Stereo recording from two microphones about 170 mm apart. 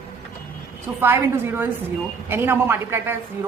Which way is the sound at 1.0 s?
15° right (ahead or behind).